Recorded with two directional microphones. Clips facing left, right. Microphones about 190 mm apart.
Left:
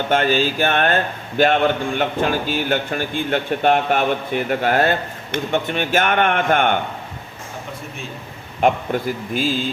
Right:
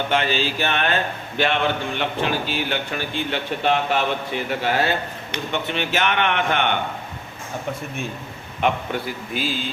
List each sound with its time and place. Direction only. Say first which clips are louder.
0.1 s a man's voice: left 7 dB; 50° left (ahead or behind)
8.6 s a man's voice: left 5 dB; 45° left (ahead or behind)